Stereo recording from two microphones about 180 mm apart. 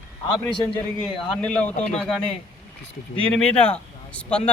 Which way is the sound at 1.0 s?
5° left (ahead or behind).